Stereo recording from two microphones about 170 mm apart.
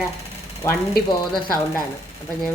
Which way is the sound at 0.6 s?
15° left (ahead or behind).